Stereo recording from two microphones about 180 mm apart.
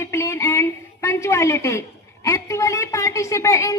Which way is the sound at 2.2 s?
15° left (ahead or behind).